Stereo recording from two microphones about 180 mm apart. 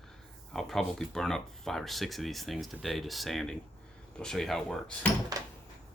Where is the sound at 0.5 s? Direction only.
Centre (ahead or behind).